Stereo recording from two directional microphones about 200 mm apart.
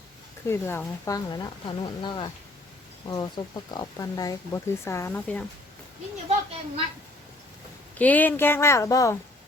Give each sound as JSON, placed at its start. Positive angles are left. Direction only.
{"t": 0.4, "sound": "speech", "side_deg": 10}
{"t": 7.9, "sound": "speech", "side_deg": 10}